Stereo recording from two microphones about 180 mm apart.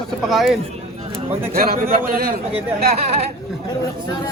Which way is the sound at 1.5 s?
55° right (ahead or behind).